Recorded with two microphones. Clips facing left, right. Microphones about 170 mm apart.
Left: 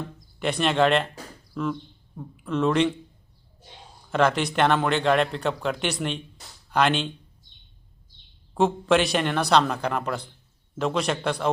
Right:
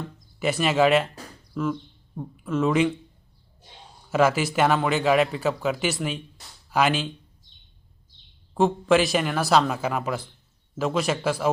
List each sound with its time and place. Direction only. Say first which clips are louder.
0.3 s speech: right 1 dB; 5° right (ahead or behind)
4.1 s speech: right 1 dB; 5° right (ahead or behind)
8.5 s speech: right 1 dB; centre (ahead or behind)